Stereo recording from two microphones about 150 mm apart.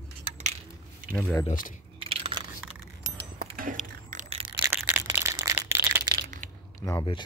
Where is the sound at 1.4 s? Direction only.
65° left (ahead or behind).